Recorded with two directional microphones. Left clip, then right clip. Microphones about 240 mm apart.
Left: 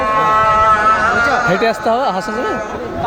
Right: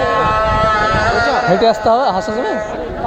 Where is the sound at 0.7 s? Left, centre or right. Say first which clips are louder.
Left 2 dB; centre.